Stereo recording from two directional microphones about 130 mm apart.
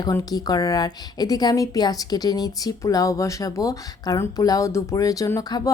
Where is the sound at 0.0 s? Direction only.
30° left (ahead or behind).